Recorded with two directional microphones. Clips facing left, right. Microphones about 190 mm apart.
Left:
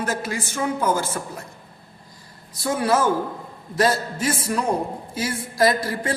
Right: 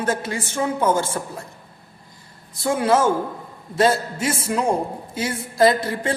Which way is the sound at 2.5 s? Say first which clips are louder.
Right 2 dB; 25° right (ahead or behind).